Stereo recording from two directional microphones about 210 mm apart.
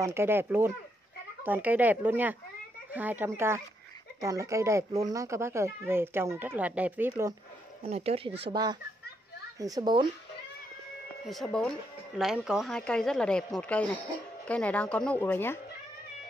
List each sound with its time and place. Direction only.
0.0 s speech: 10° right (ahead or behind)
7.8 s speech: 30° right (ahead or behind)
9.6 s speech: 15° right (ahead or behind)
11.2 s speech: centre (ahead or behind)